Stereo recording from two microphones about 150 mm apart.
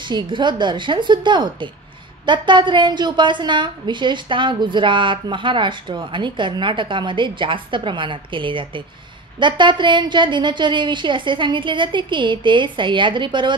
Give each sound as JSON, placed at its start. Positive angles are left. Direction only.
{"t": 0.0, "sound": "a woman's voice", "side_deg": -30}